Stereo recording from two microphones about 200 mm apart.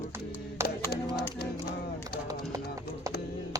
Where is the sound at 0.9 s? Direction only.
55° left (ahead or behind).